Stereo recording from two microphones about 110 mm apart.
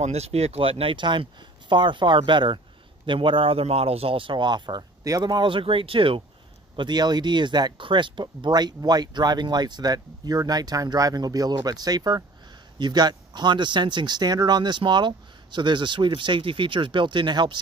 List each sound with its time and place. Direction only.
0.0 s speech: 75° right (ahead or behind); by 6.2 s 55° right (ahead or behind)
6.8 s speech: 40° right (ahead or behind)